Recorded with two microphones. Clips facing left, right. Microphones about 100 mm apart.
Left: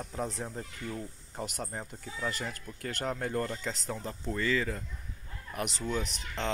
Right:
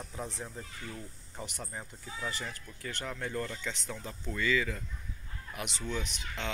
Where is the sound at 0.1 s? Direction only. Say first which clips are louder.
Left 5 dB; 35° left (ahead or behind).